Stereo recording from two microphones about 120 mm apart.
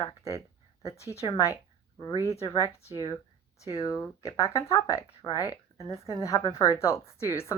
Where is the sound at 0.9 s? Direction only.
25° left (ahead or behind).